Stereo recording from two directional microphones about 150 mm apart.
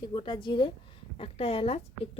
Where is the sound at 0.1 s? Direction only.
30° left (ahead or behind).